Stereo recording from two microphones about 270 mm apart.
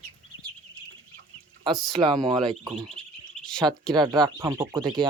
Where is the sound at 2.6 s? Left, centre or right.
Centre.